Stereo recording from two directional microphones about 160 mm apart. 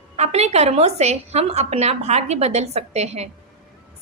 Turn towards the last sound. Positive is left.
turn(degrees=-45)  # may be behind; listen again after turning